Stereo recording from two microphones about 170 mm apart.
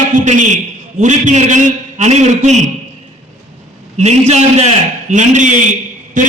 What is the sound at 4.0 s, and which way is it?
A man's voice, 40° right (ahead or behind).